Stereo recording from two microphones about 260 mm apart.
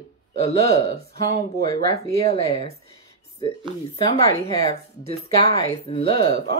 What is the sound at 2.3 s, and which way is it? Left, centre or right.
Speech, left.